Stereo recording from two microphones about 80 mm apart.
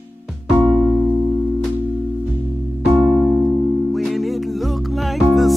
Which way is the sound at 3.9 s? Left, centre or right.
Centre.